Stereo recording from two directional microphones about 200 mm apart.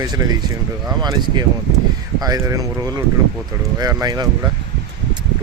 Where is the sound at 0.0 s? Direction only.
20° right (ahead or behind).